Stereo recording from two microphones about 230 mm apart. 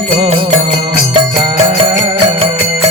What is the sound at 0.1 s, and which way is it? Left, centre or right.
Music, right.